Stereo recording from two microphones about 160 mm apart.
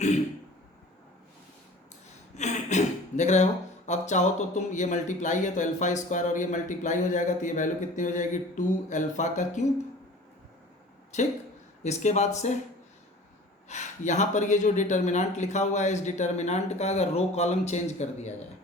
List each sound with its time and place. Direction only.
2.3 s speech: 45° left (ahead or behind)
11.1 s speech: 45° left (ahead or behind)
13.7 s speech: 50° left (ahead or behind)